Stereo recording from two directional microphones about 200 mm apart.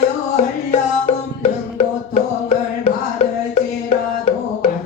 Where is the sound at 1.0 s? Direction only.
30° left (ahead or behind).